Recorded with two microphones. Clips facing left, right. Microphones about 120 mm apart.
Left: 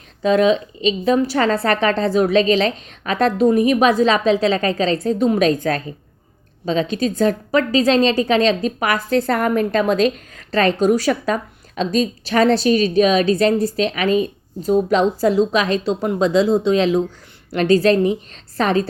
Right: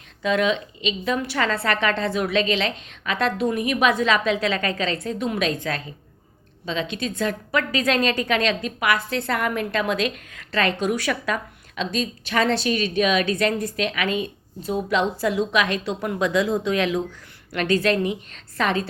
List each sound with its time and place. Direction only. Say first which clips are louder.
0.2 s a woman's voice: left 7 dB; 35° left (ahead or behind)